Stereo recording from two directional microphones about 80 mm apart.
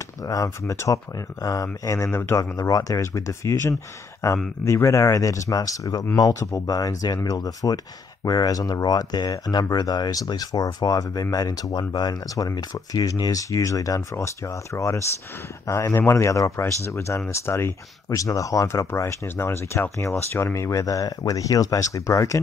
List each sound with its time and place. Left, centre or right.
0.2 s speech: left
2.0 s speech: left
2.5 s speech: left
18.1 s speech: left